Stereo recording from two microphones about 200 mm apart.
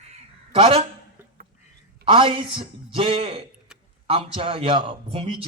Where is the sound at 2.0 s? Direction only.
25° right (ahead or behind).